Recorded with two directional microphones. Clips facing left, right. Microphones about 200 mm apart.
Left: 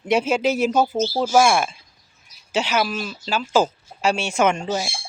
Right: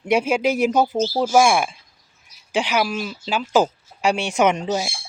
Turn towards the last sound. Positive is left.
turn(degrees=-15)  # may be behind; listen again after turning